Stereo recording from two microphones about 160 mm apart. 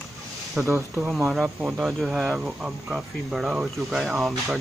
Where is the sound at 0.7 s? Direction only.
20° right (ahead or behind).